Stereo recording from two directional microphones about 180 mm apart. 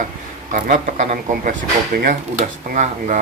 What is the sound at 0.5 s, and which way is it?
Speech, 45° right (ahead or behind).